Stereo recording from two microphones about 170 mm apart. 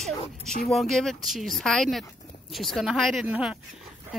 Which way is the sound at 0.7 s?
Centre (ahead or behind).